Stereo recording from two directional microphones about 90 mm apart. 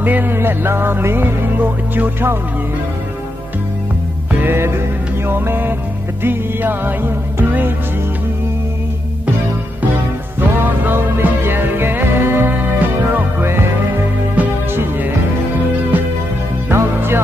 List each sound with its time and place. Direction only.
0.0 s music: 20° right (ahead or behind)
4.4 s music: 25° right (ahead or behind)
10.6 s music: 25° right (ahead or behind)